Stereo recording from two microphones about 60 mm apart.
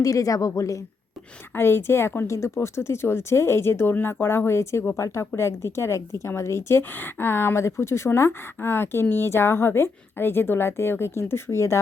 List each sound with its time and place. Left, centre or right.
0.0 s a woman's voice: left
1.5 s a woman's voice: left
4.9 s a woman's voice: left
6.9 s a woman's voice: left